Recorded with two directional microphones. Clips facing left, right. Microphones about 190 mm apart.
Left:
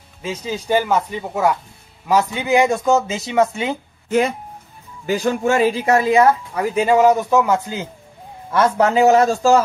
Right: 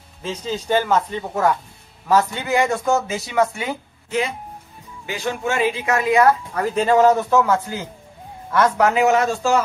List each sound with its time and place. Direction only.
0.2 s speech: 10° left (ahead or behind)
5.0 s speech: 40° left (ahead or behind)
6.5 s speech: 10° left (ahead or behind); by 9.6 s 40° left (ahead or behind)